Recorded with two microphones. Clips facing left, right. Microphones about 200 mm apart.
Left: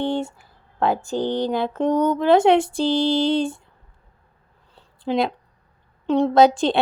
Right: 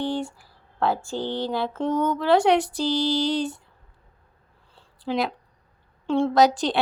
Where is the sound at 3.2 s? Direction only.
25° left (ahead or behind).